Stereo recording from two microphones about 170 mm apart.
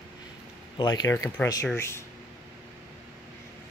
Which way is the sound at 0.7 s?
25° left (ahead or behind).